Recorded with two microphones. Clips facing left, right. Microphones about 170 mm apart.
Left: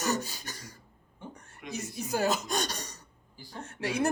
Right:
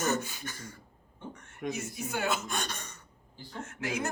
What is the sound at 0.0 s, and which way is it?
Speech, 35° left (ahead or behind).